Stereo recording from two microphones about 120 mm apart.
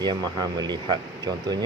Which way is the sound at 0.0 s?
35° right (ahead or behind).